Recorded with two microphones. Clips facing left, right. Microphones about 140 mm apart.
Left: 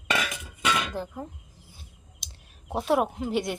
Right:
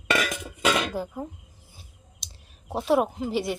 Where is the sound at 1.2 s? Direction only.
10° right (ahead or behind).